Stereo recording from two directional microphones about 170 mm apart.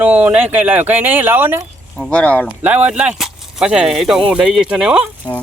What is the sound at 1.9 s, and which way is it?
Speech, 5° left (ahead or behind).